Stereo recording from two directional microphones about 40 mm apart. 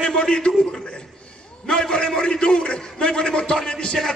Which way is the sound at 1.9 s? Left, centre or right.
Left.